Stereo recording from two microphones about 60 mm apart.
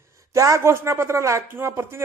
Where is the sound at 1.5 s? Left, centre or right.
Right.